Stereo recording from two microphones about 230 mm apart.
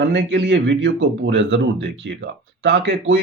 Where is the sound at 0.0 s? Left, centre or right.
Right.